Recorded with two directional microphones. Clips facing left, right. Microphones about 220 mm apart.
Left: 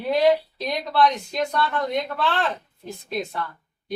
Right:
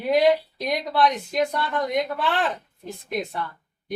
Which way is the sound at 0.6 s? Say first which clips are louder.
Left 1 dB; 15° right (ahead or behind).